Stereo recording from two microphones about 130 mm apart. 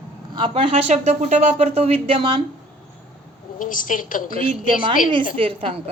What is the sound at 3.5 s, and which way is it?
Speech, 90° left.